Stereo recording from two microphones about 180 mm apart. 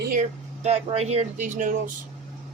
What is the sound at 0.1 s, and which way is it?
Speech, 40° right (ahead or behind).